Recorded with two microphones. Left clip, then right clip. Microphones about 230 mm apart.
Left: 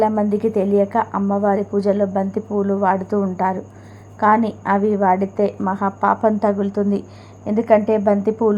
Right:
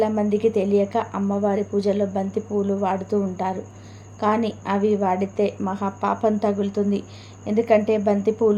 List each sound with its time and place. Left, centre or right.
0.0 s a woman's voice: centre